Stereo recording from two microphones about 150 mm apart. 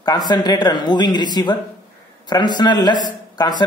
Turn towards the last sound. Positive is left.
turn(degrees=30)  # may be behind; listen again after turning